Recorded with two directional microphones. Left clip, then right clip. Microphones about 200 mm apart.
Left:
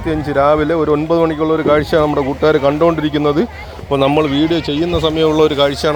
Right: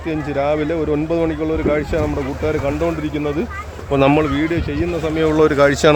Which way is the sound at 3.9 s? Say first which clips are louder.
Left 2 dB; centre (ahead or behind).